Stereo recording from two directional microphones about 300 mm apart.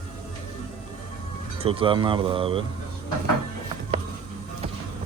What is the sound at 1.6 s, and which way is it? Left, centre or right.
Speech, centre.